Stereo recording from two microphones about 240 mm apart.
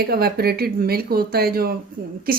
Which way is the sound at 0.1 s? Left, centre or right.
Right.